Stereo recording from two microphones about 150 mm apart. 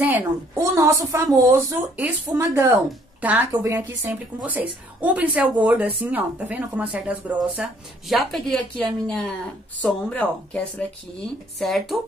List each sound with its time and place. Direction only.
0.0 s a woman's voice: 15° right (ahead or behind); by 12.0 s centre (ahead or behind)